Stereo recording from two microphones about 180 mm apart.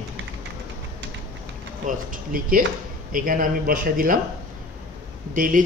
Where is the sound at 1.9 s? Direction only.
50° right (ahead or behind).